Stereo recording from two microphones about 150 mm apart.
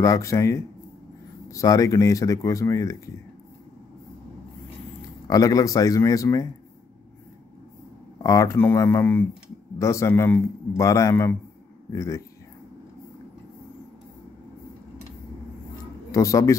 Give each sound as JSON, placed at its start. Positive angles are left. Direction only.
{"t": 0.0, "sound": "speech", "side_deg": 20}
{"t": 5.3, "sound": "speech", "side_deg": 25}
{"t": 8.2, "sound": "speech", "side_deg": 20}
{"t": 16.1, "sound": "a man's voice", "side_deg": 20}